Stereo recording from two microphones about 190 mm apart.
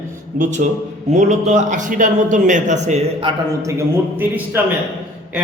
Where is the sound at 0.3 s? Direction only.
40° right (ahead or behind).